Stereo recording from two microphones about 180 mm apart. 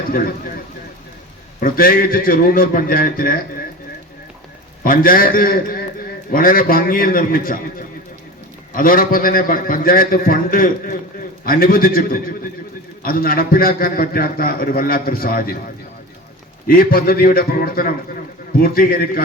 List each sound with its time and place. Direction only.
0.1 s a man's voice: 50° left (ahead or behind)
1.6 s a man's voice: 55° left (ahead or behind)
4.8 s a man's voice: 55° left (ahead or behind)
8.7 s a man's voice: 50° left (ahead or behind)
16.6 s a man's voice: 55° left (ahead or behind)